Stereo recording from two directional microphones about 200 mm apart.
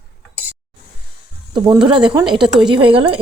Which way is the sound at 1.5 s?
20° right (ahead or behind).